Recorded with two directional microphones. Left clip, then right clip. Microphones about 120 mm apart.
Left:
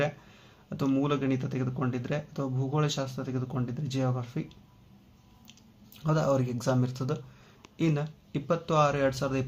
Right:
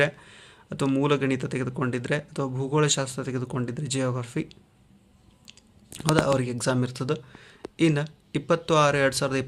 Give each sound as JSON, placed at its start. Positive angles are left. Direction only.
{"t": 0.0, "sound": "speech", "side_deg": -30}